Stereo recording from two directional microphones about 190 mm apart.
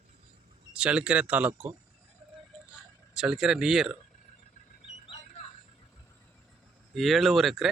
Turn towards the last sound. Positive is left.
turn(degrees=0)  # may be behind; listen again after turning